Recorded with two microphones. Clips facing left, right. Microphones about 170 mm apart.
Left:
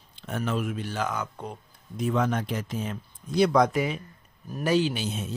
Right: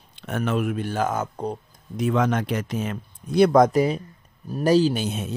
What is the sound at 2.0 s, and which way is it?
Speech, 85° right.